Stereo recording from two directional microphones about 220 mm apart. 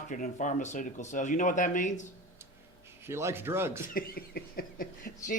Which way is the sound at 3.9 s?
45° left (ahead or behind).